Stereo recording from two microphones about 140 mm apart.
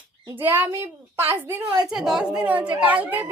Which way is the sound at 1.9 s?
5° right (ahead or behind).